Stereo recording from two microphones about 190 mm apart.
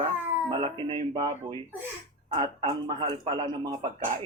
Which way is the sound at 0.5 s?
25° right (ahead or behind).